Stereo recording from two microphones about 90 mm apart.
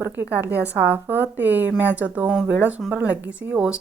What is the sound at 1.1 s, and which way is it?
Speech, 20° right (ahead or behind).